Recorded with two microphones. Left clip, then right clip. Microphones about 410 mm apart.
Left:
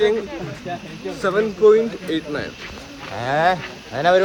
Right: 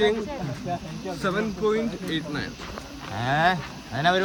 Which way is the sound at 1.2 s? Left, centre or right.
Left.